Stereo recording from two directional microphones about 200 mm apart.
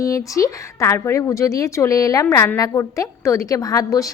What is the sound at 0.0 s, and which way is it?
A woman's voice, 15° left (ahead or behind).